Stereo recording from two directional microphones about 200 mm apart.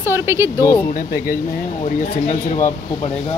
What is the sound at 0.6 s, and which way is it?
Speech, 20° left (ahead or behind).